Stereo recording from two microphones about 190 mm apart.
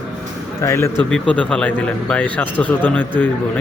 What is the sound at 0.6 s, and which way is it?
A man's voice, 15° left (ahead or behind).